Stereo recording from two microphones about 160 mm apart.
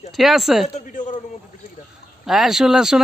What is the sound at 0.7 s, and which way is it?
Speech, 50° left (ahead or behind).